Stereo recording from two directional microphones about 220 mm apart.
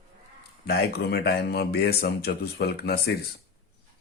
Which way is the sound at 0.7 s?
45° left (ahead or behind).